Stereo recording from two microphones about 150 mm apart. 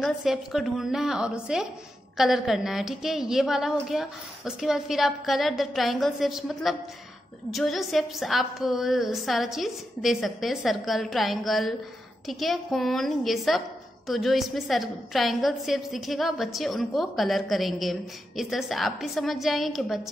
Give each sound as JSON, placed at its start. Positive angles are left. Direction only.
{"t": 0.0, "sound": "a woman's voice", "side_deg": 0}